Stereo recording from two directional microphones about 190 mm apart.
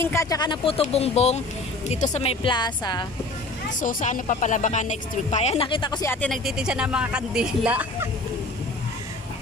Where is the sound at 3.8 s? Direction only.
45° left (ahead or behind); by 6.1 s 25° left (ahead or behind).